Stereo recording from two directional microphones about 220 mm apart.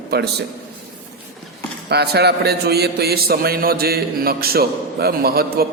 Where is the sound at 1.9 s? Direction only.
45° right (ahead or behind).